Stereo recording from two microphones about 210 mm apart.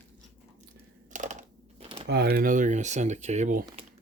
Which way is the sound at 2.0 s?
50° right (ahead or behind).